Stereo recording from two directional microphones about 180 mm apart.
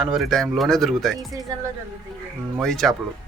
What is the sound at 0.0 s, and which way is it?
Speech, centre (ahead or behind).